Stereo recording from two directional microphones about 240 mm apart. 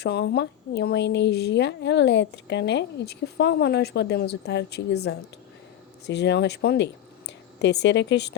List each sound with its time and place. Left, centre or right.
0.0 s speech: left